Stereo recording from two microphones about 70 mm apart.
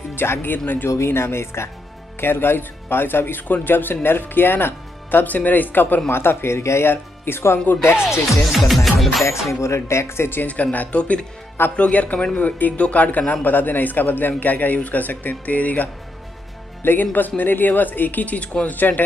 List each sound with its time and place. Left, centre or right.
0.1 s speech: left
0.8 s a man's voice: left
8.5 s music: centre
9.2 s speech: left
10.4 s a man's voice: left